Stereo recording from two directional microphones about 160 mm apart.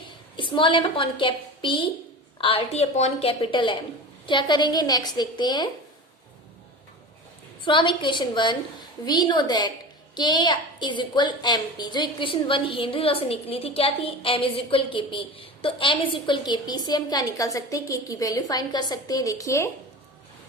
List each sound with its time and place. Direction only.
0.3 s a woman's voice: 30° left (ahead or behind)
7.6 s a woman's voice: 30° left (ahead or behind)